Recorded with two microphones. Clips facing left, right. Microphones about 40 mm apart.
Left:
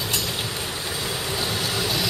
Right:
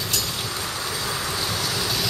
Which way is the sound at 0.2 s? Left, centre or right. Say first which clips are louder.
Even; left.